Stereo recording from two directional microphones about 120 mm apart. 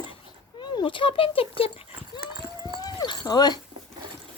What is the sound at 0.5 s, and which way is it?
Speech, 40° left (ahead or behind).